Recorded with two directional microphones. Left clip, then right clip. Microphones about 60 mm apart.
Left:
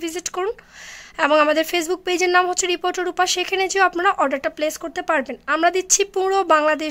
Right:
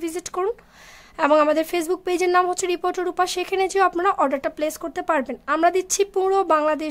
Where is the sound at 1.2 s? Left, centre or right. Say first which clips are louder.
Left 1 dB; centre.